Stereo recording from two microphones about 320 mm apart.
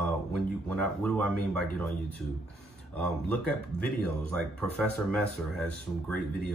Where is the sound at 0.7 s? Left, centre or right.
Centre.